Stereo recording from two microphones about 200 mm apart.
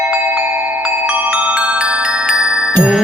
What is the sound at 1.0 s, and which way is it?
Music, 5° right (ahead or behind).